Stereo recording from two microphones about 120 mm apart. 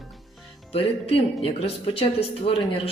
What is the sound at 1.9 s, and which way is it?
Speech, 55° left (ahead or behind).